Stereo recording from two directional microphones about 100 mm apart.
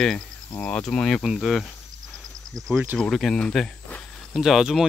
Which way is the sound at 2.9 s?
5° left (ahead or behind).